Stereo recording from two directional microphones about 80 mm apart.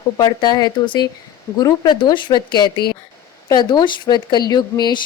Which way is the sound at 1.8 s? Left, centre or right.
Left.